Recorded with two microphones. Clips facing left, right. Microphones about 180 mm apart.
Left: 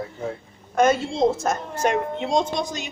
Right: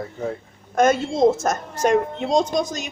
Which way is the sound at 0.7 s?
45° right (ahead or behind).